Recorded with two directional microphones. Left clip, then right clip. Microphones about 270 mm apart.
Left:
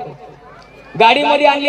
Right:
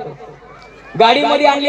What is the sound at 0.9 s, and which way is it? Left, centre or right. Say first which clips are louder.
Speech: even; right.